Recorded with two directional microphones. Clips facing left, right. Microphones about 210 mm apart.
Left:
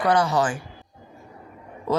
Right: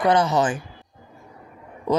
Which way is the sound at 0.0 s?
20° right (ahead or behind).